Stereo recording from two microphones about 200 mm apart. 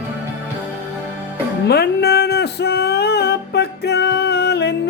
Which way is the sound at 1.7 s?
55° left (ahead or behind).